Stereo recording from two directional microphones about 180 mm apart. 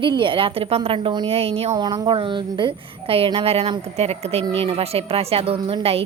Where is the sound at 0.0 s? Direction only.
25° right (ahead or behind).